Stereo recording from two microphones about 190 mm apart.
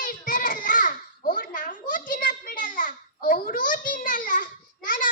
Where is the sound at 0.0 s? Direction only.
45° left (ahead or behind).